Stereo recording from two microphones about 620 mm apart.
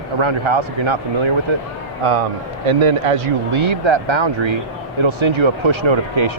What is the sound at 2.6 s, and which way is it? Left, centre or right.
Speech, right.